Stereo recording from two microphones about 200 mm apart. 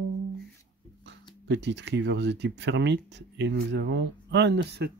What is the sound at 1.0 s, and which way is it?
Speech, 60° right (ahead or behind).